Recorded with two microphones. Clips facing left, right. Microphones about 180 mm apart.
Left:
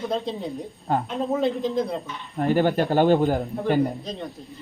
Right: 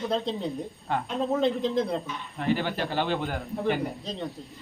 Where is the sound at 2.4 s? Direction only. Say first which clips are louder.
Left 7 dB; 45° left (ahead or behind).